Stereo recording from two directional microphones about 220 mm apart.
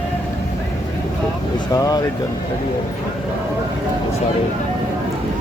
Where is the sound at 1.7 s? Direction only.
15° left (ahead or behind).